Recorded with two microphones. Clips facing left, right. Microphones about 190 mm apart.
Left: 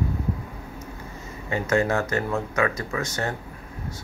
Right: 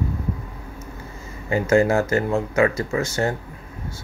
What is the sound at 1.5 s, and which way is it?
Speech, 30° right (ahead or behind).